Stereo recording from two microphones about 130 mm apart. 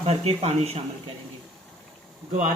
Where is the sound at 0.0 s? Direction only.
55° right (ahead or behind).